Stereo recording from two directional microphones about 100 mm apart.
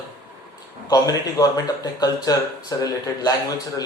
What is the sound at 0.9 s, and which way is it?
Speech, 35° left (ahead or behind).